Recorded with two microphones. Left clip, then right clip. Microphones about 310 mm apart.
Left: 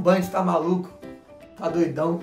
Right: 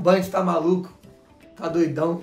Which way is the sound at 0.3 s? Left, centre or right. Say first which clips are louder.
Right 1 dB; centre.